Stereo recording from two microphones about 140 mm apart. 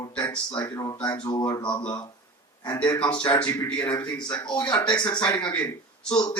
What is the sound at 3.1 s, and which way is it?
Speech, 10° left (ahead or behind).